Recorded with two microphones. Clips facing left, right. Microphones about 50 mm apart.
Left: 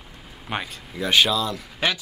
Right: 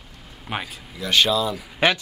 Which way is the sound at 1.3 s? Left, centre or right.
Centre.